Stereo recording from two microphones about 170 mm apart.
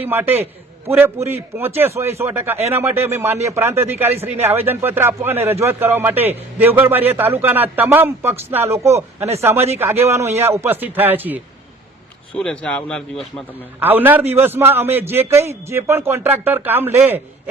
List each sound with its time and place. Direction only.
0.0 s a man's voice: 10° right (ahead or behind)
12.3 s a man's voice: 5° left (ahead or behind)
13.7 s a man's voice: 10° right (ahead or behind)